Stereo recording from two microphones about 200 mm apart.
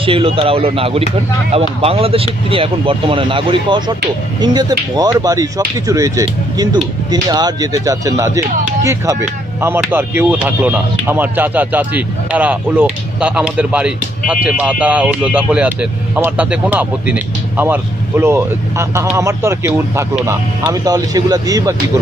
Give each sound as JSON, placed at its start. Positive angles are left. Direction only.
{"t": 0.0, "sound": "speech", "side_deg": -25}